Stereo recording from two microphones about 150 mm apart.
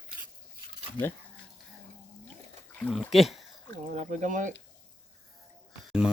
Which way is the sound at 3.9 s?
55° right (ahead or behind).